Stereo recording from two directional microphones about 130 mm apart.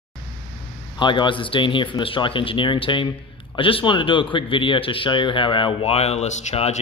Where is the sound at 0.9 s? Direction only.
35° left (ahead or behind).